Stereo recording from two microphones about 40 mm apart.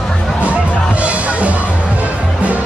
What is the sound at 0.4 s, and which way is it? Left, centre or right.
Music, right.